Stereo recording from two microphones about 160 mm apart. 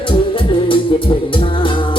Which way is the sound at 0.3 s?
30° left (ahead or behind).